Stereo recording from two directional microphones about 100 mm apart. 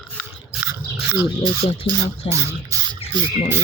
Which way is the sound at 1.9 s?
65° left (ahead or behind).